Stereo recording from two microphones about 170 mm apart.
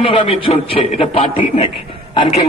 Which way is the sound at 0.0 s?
35° left (ahead or behind).